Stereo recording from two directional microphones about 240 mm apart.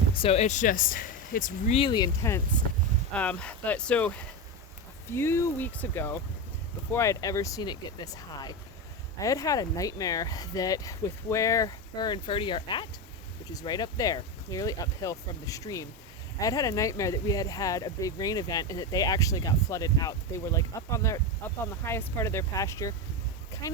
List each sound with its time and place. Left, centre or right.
0.2 s speech: left